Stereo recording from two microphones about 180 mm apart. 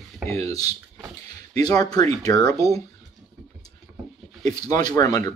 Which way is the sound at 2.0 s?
20° left (ahead or behind).